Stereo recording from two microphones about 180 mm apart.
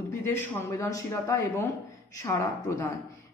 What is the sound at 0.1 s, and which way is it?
Speech, 15° left (ahead or behind).